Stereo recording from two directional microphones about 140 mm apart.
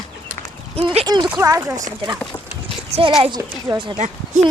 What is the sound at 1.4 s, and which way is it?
Speech, 25° right (ahead or behind).